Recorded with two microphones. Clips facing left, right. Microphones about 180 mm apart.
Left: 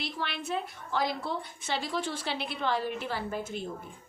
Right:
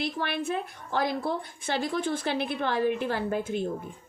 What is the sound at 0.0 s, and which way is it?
A woman's voice, 50° right (ahead or behind).